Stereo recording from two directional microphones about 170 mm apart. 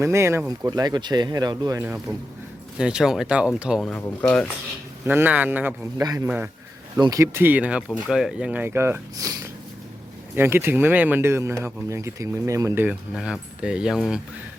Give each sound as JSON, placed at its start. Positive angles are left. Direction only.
{"t": 0.0, "sound": "speech", "side_deg": -15}
{"t": 1.8, "sound": "speech", "side_deg": -10}
{"t": 3.8, "sound": "speech", "side_deg": 10}
{"t": 5.0, "sound": "speech", "side_deg": -10}
{"t": 6.0, "sound": "speech", "side_deg": -20}
{"t": 6.2, "sound": "speech", "side_deg": -10}
{"t": 6.9, "sound": "speech", "side_deg": -20}